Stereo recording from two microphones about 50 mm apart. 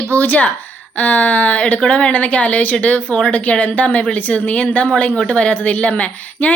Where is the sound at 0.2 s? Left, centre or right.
Left.